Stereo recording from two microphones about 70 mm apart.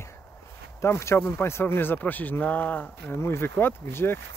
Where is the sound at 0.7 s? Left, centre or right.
Left.